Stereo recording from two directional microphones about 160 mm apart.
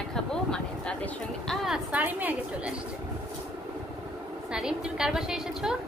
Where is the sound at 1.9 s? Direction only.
10° right (ahead or behind).